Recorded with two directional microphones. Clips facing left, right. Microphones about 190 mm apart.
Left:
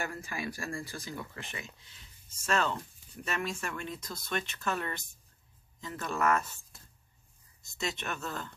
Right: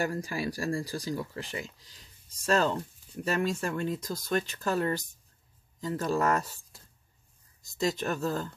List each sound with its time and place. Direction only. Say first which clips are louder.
0.0 s speech: right 6 dB; 35° right (ahead or behind)